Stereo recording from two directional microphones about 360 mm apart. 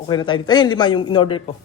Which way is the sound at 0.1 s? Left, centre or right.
Centre.